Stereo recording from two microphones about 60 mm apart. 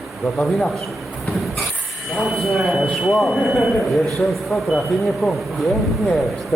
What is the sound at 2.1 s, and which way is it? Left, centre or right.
Speech, centre.